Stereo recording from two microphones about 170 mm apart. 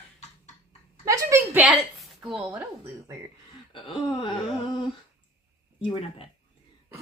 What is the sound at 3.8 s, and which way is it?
Speech, 30° left (ahead or behind).